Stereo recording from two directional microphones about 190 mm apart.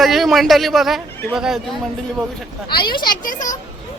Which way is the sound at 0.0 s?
Centre (ahead or behind).